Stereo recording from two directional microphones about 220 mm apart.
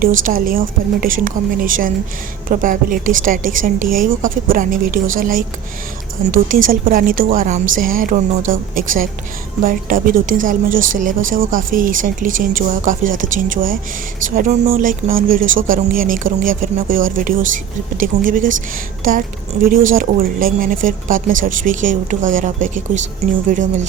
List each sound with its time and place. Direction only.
0.3 s speech: 40° right (ahead or behind)
19.6 s speech: 40° right (ahead or behind)